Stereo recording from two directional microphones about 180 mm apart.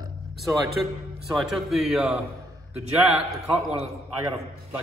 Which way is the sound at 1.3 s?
Centre (ahead or behind).